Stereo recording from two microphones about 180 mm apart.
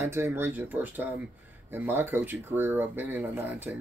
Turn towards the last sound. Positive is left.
turn(degrees=-10)  # may be behind; listen again after turning